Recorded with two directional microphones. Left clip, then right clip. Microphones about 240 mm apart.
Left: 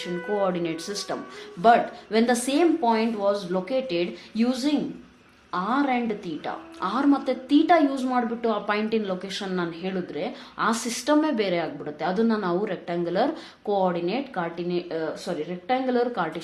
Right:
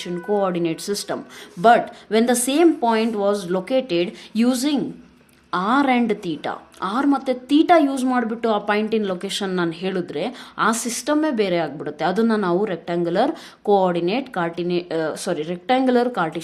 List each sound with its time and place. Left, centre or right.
0.0 s a woman's voice: right